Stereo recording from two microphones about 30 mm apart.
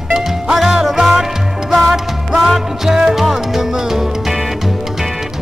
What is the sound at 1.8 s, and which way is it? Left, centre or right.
Music, centre.